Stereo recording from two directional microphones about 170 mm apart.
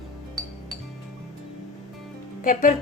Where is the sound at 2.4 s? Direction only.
50° left (ahead or behind).